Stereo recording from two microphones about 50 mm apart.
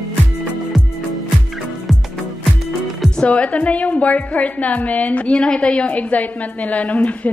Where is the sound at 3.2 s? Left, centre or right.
Left.